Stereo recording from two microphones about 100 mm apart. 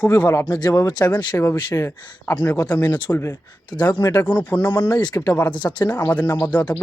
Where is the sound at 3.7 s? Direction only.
10° left (ahead or behind).